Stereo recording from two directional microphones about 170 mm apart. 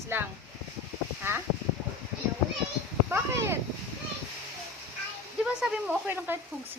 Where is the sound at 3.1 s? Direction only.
15° right (ahead or behind).